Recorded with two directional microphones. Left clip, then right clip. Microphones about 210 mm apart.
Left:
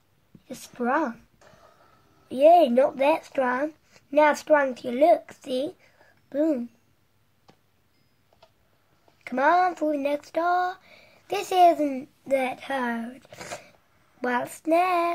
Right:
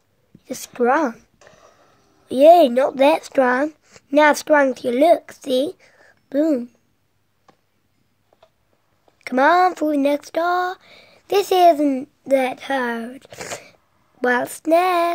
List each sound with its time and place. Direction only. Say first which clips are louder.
0.7 s speech: right 8 dB; 45° right (ahead or behind)
1.4 s a sound: right 5 dB; 25° right (ahead or behind)
2.2 s speech: right 6 dB; 45° right (ahead or behind)
9.2 s speech: right 6 dB; 40° right (ahead or behind)